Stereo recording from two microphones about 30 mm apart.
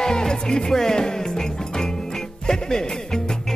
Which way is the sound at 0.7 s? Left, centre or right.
Left.